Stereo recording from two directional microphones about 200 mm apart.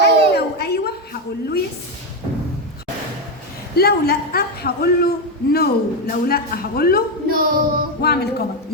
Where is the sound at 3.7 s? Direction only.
50° left (ahead or behind).